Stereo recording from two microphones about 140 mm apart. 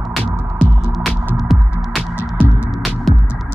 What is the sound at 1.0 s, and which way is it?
Music, centre (ahead or behind).